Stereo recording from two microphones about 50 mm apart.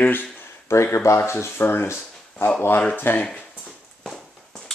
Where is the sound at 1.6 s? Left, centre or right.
Left.